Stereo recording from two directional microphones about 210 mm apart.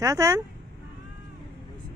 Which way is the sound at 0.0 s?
15° right (ahead or behind).